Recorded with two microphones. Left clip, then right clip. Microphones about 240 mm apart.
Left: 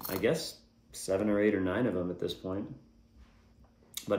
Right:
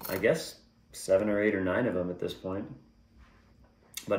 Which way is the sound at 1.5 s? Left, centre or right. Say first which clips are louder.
Right 3 dB; centre.